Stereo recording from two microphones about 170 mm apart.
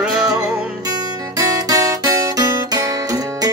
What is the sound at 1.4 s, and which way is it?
Music, 20° right (ahead or behind).